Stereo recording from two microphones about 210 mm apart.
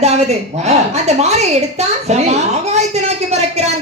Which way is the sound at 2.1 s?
30° right (ahead or behind).